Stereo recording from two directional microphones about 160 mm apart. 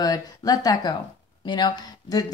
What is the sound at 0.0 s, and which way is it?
Speech, 25° left (ahead or behind).